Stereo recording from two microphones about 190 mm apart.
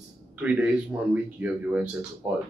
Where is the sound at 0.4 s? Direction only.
5° right (ahead or behind).